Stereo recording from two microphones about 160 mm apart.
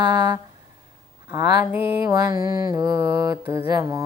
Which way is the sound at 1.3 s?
15° right (ahead or behind).